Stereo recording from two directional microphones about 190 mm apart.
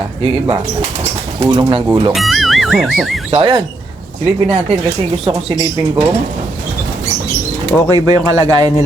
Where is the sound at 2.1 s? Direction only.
Centre (ahead or behind).